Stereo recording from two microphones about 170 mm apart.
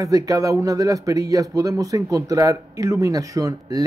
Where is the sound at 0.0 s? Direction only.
20° right (ahead or behind).